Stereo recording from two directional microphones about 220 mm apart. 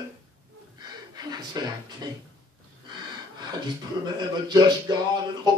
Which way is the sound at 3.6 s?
20° right (ahead or behind).